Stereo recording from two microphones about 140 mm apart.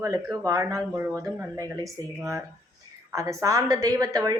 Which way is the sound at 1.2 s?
25° right (ahead or behind).